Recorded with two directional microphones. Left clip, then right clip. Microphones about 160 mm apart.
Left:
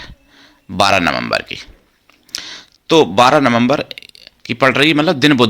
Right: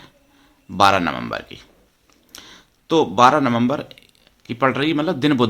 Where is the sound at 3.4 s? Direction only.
25° left (ahead or behind).